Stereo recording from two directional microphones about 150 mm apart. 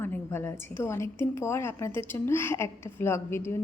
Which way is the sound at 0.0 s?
15° left (ahead or behind).